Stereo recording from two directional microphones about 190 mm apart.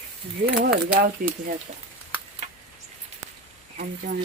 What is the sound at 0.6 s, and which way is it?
Speech, 55° right (ahead or behind).